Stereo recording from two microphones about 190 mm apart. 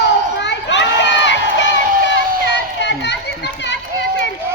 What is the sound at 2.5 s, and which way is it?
Run, 65° left (ahead or behind).